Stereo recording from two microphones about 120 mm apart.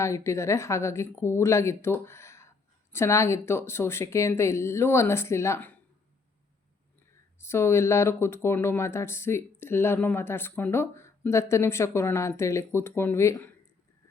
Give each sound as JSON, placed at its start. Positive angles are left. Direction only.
{"t": 0.0, "sound": "speech", "side_deg": 25}
{"t": 7.3, "sound": "speech", "side_deg": 20}